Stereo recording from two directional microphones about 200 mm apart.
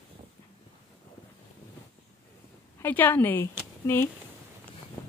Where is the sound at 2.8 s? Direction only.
10° left (ahead or behind).